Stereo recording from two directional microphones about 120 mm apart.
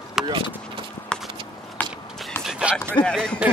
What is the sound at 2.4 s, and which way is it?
Music, 5° right (ahead or behind).